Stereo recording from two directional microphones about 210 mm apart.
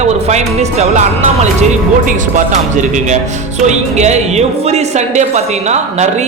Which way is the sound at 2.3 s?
35° right (ahead or behind).